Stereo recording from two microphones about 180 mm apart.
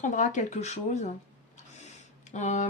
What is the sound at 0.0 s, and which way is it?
Speech, 45° left (ahead or behind).